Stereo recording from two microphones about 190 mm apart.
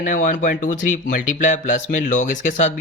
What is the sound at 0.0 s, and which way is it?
Speech, 40° left (ahead or behind).